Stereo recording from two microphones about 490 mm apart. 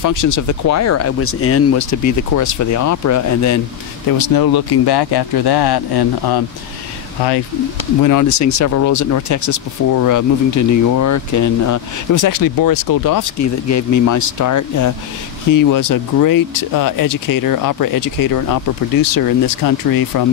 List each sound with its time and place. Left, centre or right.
0.0 s speech: left
4.2 s speech: left
8.0 s speech: left